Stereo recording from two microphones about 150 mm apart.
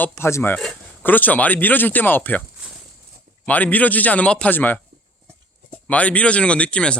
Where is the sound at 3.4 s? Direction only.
10° left (ahead or behind).